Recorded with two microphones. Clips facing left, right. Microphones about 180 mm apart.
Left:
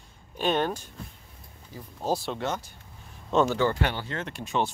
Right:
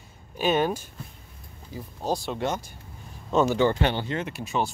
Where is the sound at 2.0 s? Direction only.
Centre (ahead or behind).